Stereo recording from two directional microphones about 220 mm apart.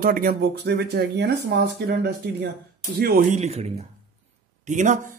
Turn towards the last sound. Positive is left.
turn(degrees=-35)  # may be behind; listen again after turning